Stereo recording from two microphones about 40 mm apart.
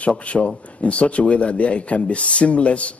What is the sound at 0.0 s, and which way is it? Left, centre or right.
Speech, left.